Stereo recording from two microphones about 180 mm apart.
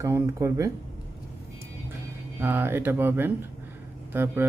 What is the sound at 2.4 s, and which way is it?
A man's voice, 10° right (ahead or behind).